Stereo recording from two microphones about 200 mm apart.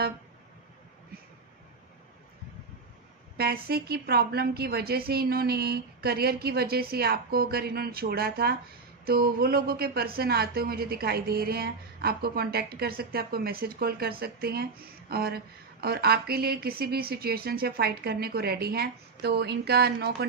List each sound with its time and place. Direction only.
3.3 s speech: 50° right (ahead or behind)